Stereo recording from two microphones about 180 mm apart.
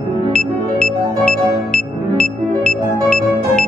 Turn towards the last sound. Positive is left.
turn(degrees=5)  # may be behind; listen again after turning